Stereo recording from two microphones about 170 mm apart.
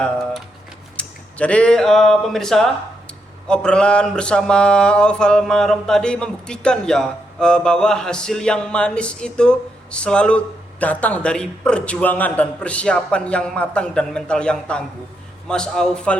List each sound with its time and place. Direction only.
0.9 s speech: 5° left (ahead or behind)
3.4 s mantra: 5° left (ahead or behind)